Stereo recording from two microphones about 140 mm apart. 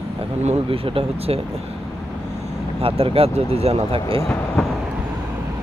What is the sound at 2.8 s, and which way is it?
Speech, 45° right (ahead or behind).